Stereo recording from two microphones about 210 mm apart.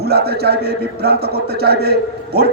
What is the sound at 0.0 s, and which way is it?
A man's voice, 50° right (ahead or behind).